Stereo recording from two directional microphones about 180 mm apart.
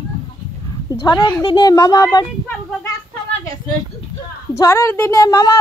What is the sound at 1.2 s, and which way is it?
Speech, 25° left (ahead or behind).